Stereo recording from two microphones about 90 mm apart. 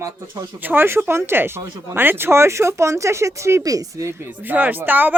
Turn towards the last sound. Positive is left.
turn(degrees=-20)  # may be behind; listen again after turning